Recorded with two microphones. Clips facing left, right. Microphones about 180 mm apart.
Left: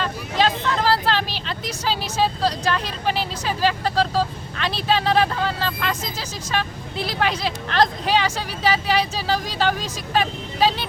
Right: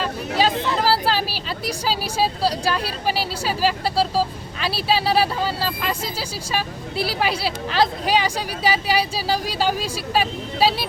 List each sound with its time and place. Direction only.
0.0 s speech: 10° right (ahead or behind)